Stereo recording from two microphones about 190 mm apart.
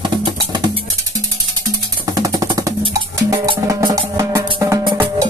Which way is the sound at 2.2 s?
20° right (ahead or behind).